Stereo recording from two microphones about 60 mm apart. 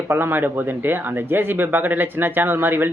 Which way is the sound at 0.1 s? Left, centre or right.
Right.